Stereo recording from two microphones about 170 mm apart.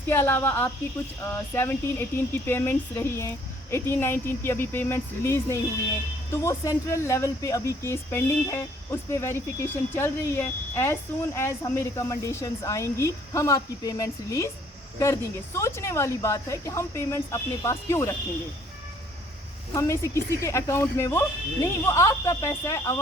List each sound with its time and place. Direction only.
0.1 s speech: 10° left (ahead or behind)
19.7 s speech: 15° left (ahead or behind)